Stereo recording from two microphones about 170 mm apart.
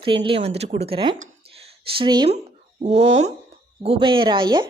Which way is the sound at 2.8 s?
40° right (ahead or behind).